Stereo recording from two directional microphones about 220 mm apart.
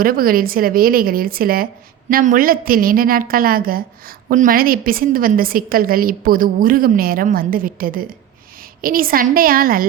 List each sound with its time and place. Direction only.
0.0 s a woman's voice: 40° right (ahead or behind)